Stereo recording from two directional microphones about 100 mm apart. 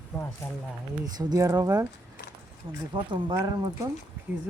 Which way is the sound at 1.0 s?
40° right (ahead or behind).